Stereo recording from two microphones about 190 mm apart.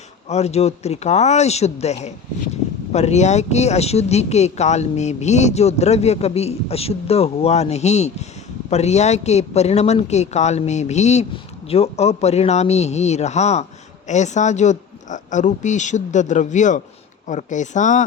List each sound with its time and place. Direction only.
0.3 s speech: 35° left (ahead or behind)